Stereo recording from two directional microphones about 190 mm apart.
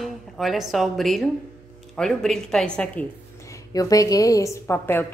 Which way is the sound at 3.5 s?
20° left (ahead or behind).